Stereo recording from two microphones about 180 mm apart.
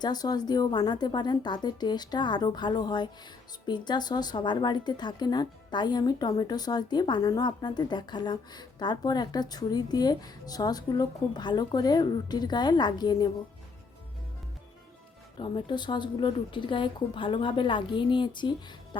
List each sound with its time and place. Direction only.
0.0 s a woman's voice: 20° left (ahead or behind)
15.4 s a woman's voice: 25° left (ahead or behind)